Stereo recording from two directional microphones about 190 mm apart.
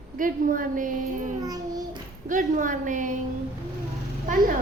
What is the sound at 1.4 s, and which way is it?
Child singing, 20° right (ahead or behind).